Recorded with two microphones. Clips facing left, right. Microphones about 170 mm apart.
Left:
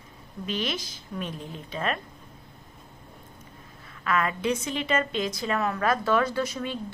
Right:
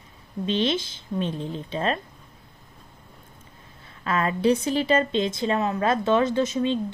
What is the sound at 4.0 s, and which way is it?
A woman's voice, 30° right (ahead or behind).